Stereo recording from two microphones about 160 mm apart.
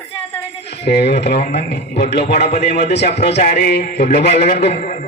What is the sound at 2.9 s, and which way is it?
A man's voice, 90° left.